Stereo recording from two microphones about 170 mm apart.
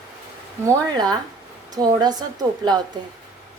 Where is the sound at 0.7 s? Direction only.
25° right (ahead or behind).